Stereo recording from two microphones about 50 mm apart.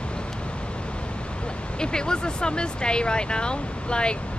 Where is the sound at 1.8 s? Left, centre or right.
Centre.